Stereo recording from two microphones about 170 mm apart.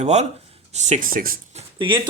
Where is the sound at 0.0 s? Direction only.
40° right (ahead or behind); by 1.4 s 55° right (ahead or behind).